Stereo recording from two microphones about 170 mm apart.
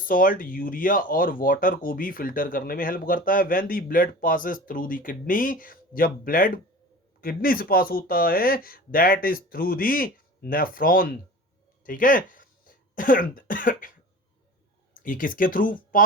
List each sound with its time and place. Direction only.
0.0 s speech: 55° left (ahead or behind)
14.9 s speech: 55° left (ahead or behind)